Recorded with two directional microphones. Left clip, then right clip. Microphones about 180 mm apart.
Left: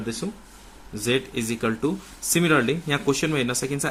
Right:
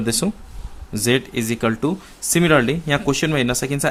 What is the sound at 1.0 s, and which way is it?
Speech, 35° right (ahead or behind).